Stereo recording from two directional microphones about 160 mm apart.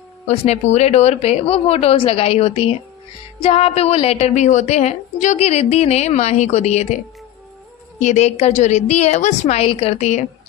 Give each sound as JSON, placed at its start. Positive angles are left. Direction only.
{"t": 0.3, "sound": "a woman's voice", "side_deg": 40}
{"t": 8.0, "sound": "a woman's voice", "side_deg": 45}